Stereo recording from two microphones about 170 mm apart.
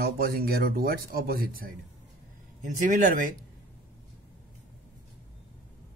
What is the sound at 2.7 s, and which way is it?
Speech, 50° right (ahead or behind).